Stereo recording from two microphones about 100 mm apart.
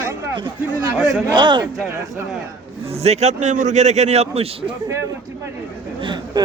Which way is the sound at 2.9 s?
90° right.